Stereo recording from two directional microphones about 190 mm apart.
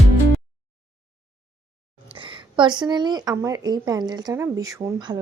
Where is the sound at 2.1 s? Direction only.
25° right (ahead or behind).